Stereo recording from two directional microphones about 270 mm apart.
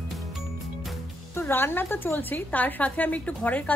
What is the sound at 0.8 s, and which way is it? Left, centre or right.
A woman's voice, centre.